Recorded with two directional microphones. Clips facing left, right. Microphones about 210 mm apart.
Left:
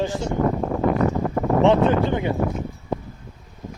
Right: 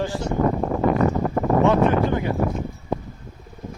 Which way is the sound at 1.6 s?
25° left (ahead or behind).